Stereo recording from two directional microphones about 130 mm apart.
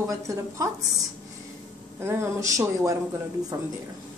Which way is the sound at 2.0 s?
20° right (ahead or behind).